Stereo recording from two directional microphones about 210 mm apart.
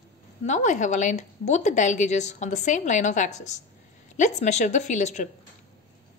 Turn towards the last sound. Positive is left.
turn(degrees=35)  # may be behind; listen again after turning